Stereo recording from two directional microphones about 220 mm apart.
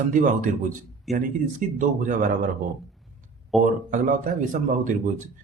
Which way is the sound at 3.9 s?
35° right (ahead or behind).